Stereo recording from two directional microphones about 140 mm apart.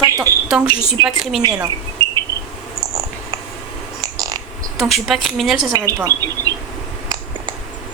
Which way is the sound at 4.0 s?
25° right (ahead or behind).